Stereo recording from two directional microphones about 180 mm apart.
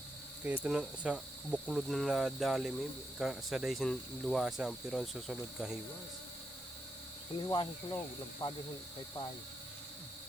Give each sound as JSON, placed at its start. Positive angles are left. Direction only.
{"t": 0.4, "sound": "speech", "side_deg": -5}
{"t": 7.4, "sound": "speech", "side_deg": 25}